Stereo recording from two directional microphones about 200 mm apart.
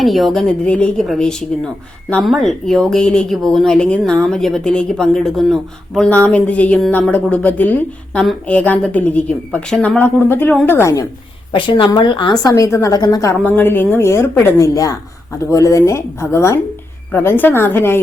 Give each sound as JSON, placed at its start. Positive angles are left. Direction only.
{"t": 0.0, "sound": "speech", "side_deg": 0}
{"t": 11.5, "sound": "a woman's voice", "side_deg": 25}